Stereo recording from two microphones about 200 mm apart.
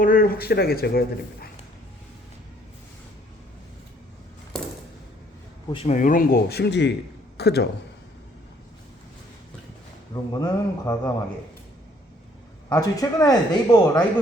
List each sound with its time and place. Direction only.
0.0 s speech: 45° left (ahead or behind)
5.7 s speech: 35° left (ahead or behind); by 7.7 s 55° left (ahead or behind)
10.3 s a man's voice: 20° left (ahead or behind)
12.6 s a man's voice: 20° left (ahead or behind)